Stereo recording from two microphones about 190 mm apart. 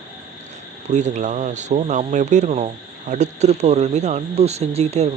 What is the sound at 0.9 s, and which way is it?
Speech, 40° right (ahead or behind).